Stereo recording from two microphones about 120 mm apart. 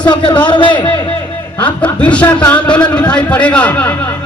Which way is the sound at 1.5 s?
10° left (ahead or behind).